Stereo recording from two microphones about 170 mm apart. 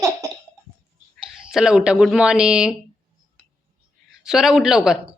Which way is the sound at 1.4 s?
5° right (ahead or behind).